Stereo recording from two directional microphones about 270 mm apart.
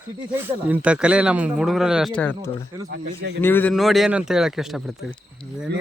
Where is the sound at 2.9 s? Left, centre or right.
Right.